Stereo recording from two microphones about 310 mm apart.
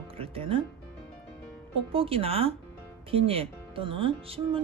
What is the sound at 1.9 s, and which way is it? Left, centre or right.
Speech, centre.